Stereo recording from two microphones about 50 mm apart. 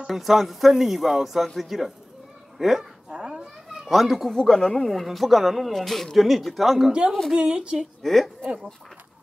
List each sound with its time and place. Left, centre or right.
0.0 s speech: centre
3.1 s children playing: centre
3.8 s speech: centre
7.3 s speech: centre
8.0 s a woman's voice: centre